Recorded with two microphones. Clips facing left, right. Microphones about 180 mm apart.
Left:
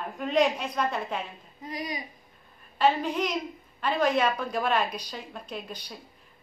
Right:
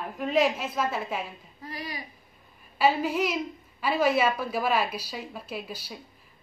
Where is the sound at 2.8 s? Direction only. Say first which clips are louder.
Right 1 dB; 5° right (ahead or behind).